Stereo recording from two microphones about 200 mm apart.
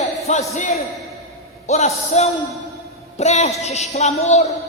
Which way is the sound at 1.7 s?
35° left (ahead or behind).